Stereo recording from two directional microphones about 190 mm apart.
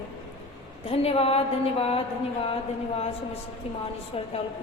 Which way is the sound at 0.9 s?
30° left (ahead or behind).